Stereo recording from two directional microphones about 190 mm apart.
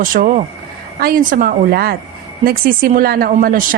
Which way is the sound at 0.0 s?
45° right (ahead or behind).